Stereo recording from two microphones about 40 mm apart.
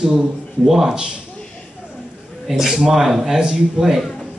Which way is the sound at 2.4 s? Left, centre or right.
Centre.